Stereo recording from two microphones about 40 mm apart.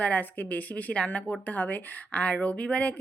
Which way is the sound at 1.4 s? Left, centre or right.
Left.